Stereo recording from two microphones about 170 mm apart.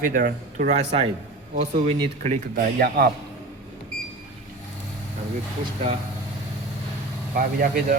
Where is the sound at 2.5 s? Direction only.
65° right (ahead or behind).